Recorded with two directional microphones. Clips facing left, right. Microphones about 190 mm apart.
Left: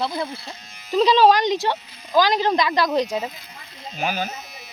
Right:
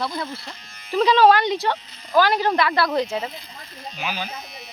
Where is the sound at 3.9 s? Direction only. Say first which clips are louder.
Left 5 dB; 45° left (ahead or behind).